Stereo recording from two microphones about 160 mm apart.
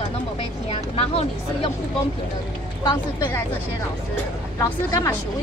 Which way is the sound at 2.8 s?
20° left (ahead or behind).